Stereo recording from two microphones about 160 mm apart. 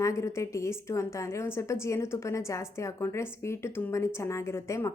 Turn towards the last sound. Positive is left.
turn(degrees=15)  # may be behind; listen again after turning